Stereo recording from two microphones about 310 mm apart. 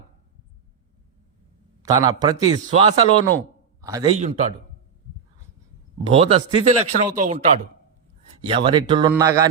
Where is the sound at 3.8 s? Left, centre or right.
Centre.